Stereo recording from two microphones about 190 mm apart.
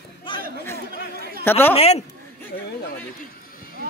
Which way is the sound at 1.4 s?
10° left (ahead or behind).